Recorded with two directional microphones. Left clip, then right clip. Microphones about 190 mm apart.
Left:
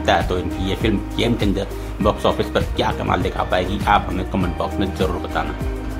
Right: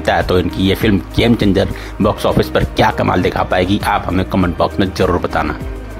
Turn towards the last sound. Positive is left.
turn(degrees=-35)  # may be behind; listen again after turning